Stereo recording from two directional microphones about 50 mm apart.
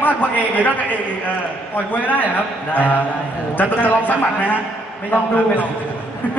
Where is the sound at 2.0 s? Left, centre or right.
Left.